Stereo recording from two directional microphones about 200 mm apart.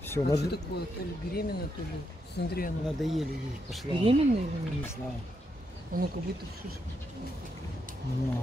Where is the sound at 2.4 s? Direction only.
60° left (ahead or behind).